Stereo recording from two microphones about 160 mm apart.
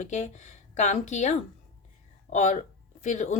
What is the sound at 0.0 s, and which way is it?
A woman's voice, 50° left (ahead or behind).